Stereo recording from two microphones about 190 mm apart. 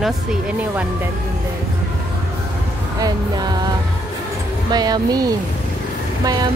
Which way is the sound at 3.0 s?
20° right (ahead or behind).